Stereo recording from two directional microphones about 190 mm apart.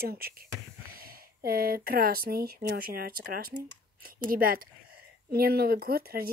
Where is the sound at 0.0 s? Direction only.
55° right (ahead or behind).